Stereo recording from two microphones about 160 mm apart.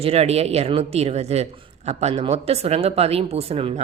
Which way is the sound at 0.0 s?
40° right (ahead or behind).